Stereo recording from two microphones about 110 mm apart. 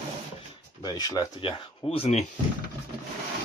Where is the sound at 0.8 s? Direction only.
35° left (ahead or behind).